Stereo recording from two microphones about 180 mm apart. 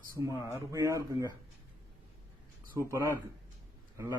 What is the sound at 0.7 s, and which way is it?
Speech, 20° right (ahead or behind).